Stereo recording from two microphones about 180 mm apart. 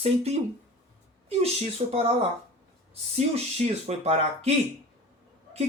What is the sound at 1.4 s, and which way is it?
Speech, 35° right (ahead or behind).